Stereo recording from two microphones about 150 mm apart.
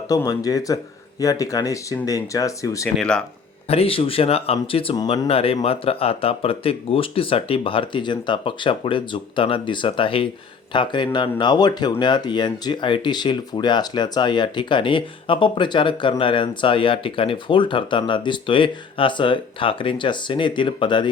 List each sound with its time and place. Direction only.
0.1 s speech: 25° left (ahead or behind)
3.0 s speech: 5° left (ahead or behind)
3.7 s speech: 40° left (ahead or behind)